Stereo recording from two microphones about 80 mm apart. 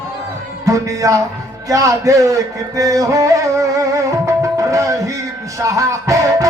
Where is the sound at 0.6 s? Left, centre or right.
Right.